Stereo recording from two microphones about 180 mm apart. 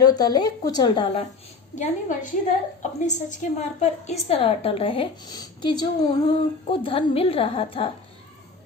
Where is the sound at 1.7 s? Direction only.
40° left (ahead or behind).